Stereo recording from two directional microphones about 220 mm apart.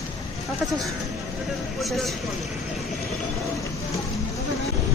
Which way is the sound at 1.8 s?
Centre (ahead or behind).